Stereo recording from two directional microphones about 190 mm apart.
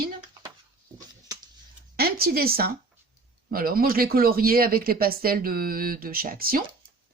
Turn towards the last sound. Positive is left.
turn(degrees=-50)  # may be behind; listen again after turning